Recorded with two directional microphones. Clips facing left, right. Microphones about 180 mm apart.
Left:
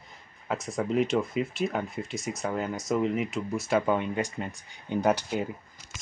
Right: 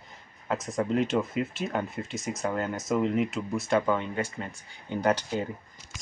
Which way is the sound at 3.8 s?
15° left (ahead or behind).